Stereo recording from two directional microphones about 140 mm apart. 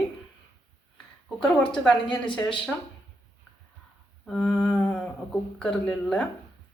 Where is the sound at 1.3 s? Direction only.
5° left (ahead or behind).